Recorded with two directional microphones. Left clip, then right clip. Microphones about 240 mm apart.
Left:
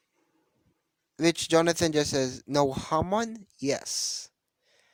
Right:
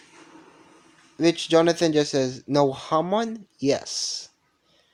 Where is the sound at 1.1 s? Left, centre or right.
Left.